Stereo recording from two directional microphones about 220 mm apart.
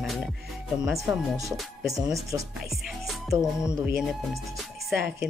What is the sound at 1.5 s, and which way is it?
Speech, centre (ahead or behind).